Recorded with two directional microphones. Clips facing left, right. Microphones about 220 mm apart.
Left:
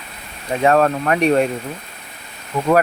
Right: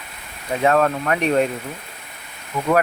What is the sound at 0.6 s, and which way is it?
Speech, 40° left (ahead or behind).